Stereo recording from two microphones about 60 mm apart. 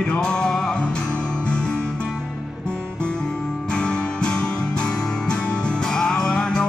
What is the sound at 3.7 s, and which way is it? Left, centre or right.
Music, centre.